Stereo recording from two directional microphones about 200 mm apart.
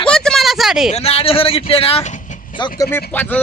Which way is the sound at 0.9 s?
30° left (ahead or behind).